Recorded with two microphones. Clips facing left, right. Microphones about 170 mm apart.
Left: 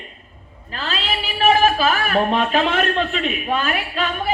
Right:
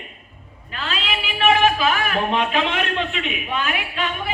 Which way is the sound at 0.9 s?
35° left (ahead or behind).